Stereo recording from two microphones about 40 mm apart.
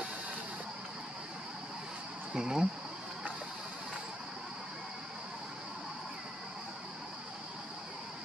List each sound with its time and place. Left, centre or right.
2.3 s speech: centre